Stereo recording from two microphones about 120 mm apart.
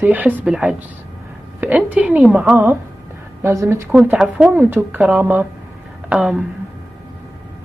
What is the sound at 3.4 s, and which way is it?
Speech, 25° right (ahead or behind).